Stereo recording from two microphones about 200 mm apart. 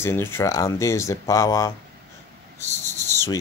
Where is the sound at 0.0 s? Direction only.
10° left (ahead or behind).